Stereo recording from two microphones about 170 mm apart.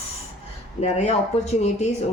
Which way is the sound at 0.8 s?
40° left (ahead or behind).